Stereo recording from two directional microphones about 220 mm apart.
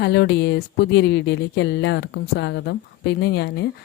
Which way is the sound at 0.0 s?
50° left (ahead or behind).